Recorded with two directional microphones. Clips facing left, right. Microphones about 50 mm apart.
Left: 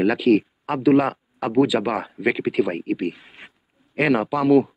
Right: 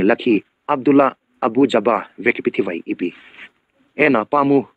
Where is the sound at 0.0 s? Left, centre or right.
Right.